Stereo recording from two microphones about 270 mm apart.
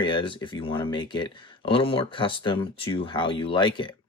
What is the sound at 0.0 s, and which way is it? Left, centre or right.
Speech, centre.